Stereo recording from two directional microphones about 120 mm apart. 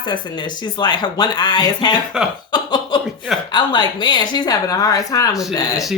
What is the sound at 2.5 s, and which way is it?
Speech, 40° left (ahead or behind).